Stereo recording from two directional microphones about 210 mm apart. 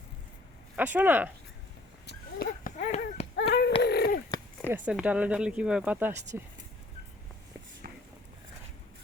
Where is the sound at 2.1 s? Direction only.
45° left (ahead or behind).